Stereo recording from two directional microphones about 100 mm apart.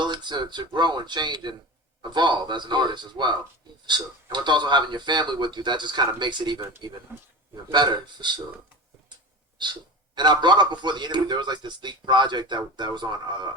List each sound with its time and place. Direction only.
0.0 s a man's voice: 50° right (ahead or behind)
10.2 s a man's voice: 50° right (ahead or behind)